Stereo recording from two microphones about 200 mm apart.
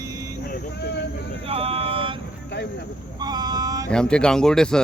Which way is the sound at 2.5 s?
55° left (ahead or behind).